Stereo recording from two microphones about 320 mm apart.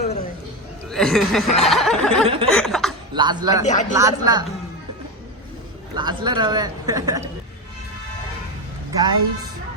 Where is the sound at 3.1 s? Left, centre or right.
Centre.